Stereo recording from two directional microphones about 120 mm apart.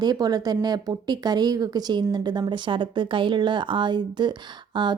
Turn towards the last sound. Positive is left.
turn(degrees=-40)  # may be behind; listen again after turning